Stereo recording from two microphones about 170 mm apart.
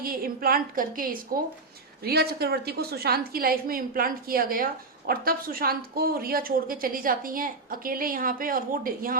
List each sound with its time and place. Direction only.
0.0 s a woman's voice: 60° right (ahead or behind)